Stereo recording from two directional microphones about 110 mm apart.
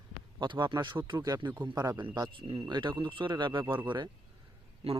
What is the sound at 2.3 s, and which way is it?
Speech, 50° right (ahead or behind).